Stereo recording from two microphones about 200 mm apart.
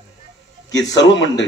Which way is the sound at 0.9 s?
65° left (ahead or behind).